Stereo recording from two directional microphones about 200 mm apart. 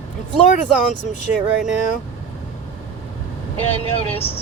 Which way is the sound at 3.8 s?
30° left (ahead or behind).